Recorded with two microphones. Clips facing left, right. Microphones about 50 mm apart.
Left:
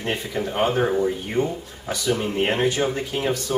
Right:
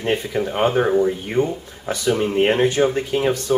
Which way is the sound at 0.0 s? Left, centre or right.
Centre.